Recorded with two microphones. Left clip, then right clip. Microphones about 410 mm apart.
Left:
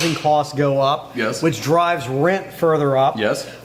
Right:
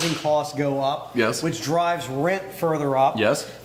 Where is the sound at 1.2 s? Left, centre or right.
Right.